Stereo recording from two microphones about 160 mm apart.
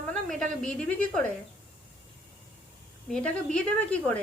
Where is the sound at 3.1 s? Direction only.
5° left (ahead or behind).